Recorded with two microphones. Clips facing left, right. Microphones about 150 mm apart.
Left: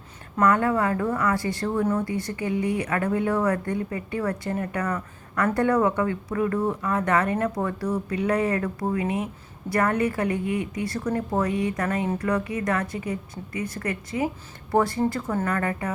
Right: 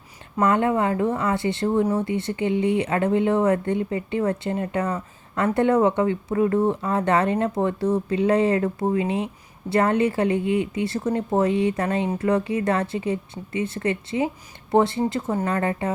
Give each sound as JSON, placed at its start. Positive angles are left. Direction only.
{"t": 0.3, "sound": "speech", "side_deg": -25}